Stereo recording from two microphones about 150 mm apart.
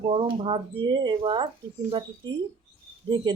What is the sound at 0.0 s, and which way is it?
Speech, 35° right (ahead or behind).